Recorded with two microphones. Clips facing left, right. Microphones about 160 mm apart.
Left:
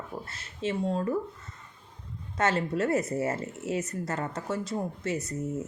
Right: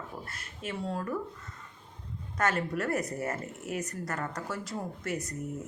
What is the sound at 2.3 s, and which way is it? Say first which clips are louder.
Speech: left 3 dB; 25° left (ahead or behind).